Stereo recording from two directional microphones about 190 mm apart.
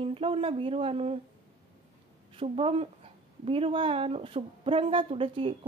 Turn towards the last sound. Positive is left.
turn(degrees=-30)  # may be behind; listen again after turning